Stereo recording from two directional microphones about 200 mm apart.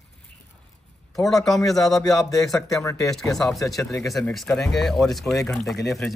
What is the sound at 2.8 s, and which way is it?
Speech, 15° left (ahead or behind).